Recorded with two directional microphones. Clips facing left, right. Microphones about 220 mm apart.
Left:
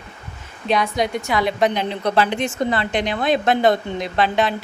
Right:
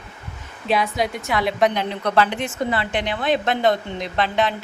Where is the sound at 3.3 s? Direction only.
10° left (ahead or behind).